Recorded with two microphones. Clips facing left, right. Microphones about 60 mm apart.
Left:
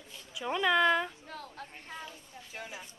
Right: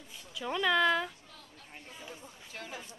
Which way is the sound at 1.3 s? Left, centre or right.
Left.